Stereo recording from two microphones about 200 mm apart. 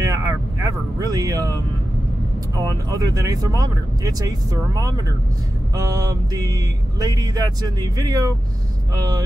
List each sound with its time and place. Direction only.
0.0 s speech: 15° right (ahead or behind)
5.8 s speech: 15° right (ahead or behind)